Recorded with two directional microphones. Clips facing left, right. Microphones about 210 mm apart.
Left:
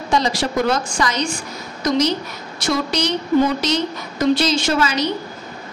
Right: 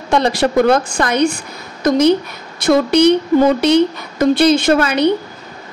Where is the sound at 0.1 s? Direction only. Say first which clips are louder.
Right 6 dB; 60° right (ahead or behind).